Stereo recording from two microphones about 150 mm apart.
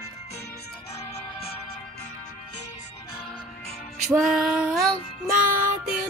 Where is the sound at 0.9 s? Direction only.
45° left (ahead or behind).